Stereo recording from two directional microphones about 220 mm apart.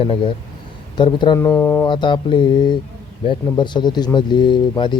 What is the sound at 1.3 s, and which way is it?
Speech, 10° left (ahead or behind).